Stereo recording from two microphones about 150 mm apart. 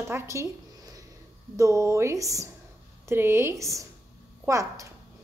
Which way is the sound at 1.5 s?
20° right (ahead or behind).